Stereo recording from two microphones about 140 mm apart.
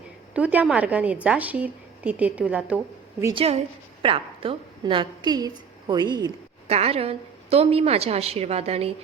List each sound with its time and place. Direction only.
0.3 s a woman's voice: 10° right (ahead or behind)
3.3 s a woman's voice: 45° right (ahead or behind)
6.7 s a woman's voice: 45° right (ahead or behind)